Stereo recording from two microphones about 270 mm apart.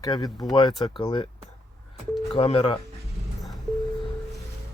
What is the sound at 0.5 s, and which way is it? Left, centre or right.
Speech, centre.